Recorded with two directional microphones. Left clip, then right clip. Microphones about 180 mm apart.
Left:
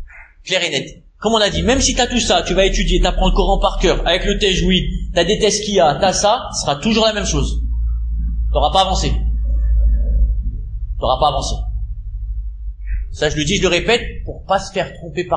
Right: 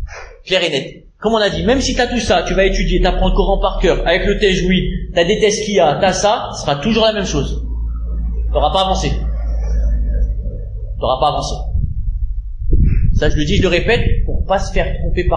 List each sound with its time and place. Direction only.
0.5 s a man's voice: 30° left (ahead or behind)
8.5 s a man's voice: 35° left (ahead or behind)
11.0 s a man's voice: 30° left (ahead or behind)
13.1 s a man's voice: 35° left (ahead or behind)